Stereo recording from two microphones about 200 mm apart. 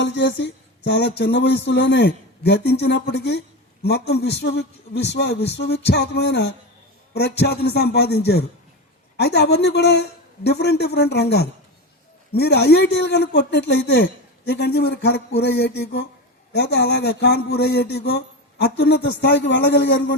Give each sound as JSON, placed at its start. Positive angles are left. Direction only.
{"t": 0.0, "sound": "a man's voice", "side_deg": 65}